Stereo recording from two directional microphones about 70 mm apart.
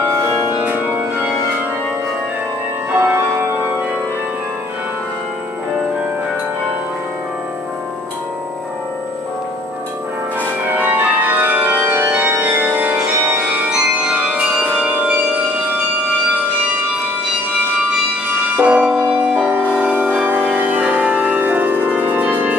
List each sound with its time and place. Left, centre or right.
3.0 s music: right
10.8 s organ: right
12.1 s music: right
13.7 s music: centre
18.6 s music: right